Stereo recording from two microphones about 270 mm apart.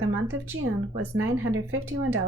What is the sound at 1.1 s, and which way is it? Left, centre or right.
Speech, right.